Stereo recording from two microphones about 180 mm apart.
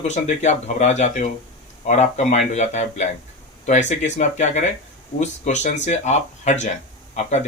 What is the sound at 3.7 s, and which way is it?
Speech, 40° left (ahead or behind).